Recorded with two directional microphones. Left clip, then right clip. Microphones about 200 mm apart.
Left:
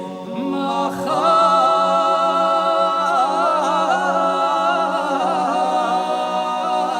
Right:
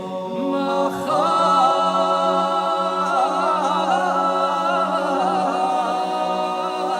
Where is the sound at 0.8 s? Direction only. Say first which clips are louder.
Left 3 dB; 25° left (ahead or behind).